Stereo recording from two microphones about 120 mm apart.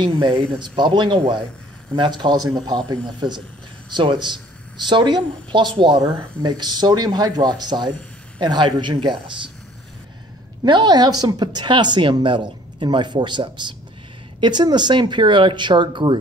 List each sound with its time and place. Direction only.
0.0 s speech: 40° right (ahead or behind)
10.6 s speech: 35° right (ahead or behind)